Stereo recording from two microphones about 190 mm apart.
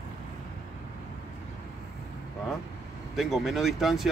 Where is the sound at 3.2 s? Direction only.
Centre (ahead or behind).